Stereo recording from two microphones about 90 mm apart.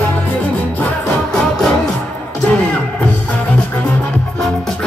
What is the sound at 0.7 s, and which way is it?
Music, 15° left (ahead or behind).